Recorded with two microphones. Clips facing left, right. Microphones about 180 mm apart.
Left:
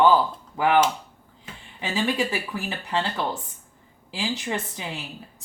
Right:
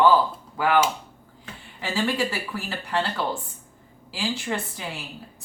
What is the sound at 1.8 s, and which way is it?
A woman's voice, 20° left (ahead or behind).